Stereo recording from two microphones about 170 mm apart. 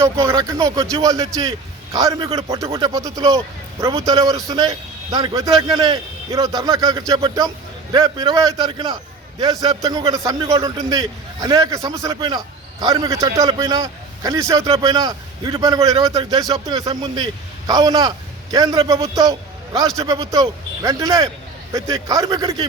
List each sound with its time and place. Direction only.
0.0 s a man's voice: 15° right (ahead or behind)